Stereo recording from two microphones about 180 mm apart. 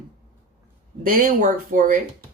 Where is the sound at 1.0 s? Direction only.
50° right (ahead or behind).